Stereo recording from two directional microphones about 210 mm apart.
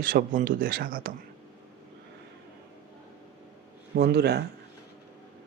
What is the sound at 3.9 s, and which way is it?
Speech, 50° right (ahead or behind).